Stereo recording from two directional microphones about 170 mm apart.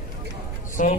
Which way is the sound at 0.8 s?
50° left (ahead or behind).